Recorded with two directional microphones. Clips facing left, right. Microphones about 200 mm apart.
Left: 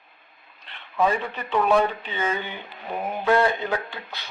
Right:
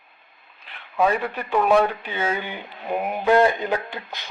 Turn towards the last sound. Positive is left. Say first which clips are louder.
# right 2 dB
turn(degrees=-15)  # may be behind; listen again after turning